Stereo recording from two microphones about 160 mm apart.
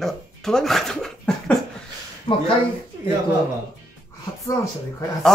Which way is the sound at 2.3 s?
25° left (ahead or behind).